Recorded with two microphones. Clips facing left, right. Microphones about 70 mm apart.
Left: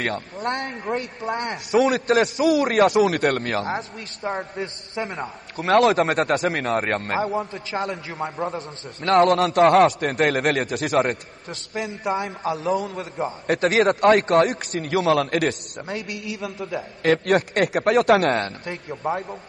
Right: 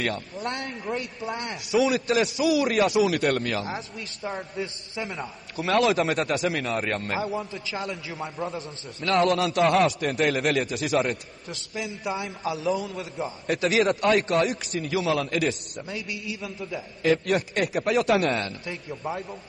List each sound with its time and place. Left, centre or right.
0.0 s a man's voice: left